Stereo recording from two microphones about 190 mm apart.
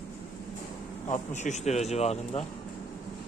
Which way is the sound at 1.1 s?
40° left (ahead or behind).